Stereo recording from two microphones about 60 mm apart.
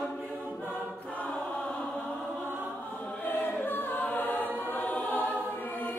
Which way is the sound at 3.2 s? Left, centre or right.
Left.